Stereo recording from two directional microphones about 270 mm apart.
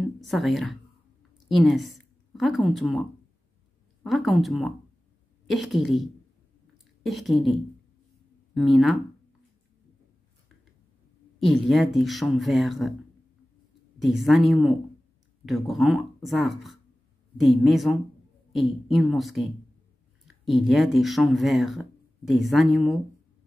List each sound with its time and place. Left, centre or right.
0.2 s a woman's voice: centre
8.5 s speech: centre
11.3 s speech: centre
14.0 s speech: centre